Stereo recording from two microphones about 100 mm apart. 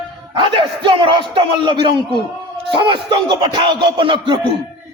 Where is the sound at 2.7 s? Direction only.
55° right (ahead or behind).